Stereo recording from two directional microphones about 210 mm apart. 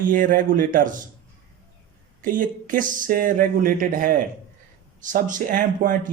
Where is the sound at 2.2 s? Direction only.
40° right (ahead or behind).